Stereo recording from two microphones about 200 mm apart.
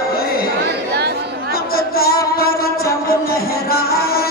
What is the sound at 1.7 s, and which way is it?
Music, 50° left (ahead or behind).